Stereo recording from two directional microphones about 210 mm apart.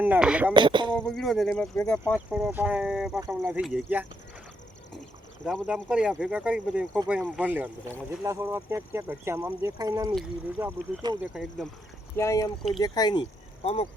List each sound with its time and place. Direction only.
0.0 s speech: 5° right (ahead or behind)
0.5 s speech: 20° right (ahead or behind)
1.0 s speech: centre (ahead or behind)
2.3 s speech: 5° right (ahead or behind)
5.5 s speech: 5° right (ahead or behind)
11.2 s speech: centre (ahead or behind)
12.1 s speech: 15° left (ahead or behind)